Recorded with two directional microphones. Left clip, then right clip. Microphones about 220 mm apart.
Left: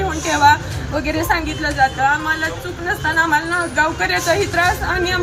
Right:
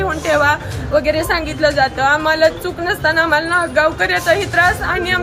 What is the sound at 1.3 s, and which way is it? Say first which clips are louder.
A woman's voice: right 4 dB; 25° right (ahead or behind).